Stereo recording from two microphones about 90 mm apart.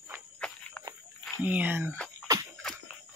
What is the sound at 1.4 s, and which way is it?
Speech, 20° right (ahead or behind).